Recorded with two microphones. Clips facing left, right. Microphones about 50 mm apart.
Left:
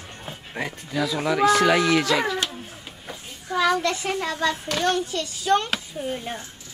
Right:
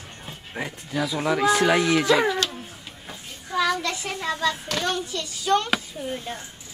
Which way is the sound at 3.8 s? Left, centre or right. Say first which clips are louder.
Left 4 dB; left.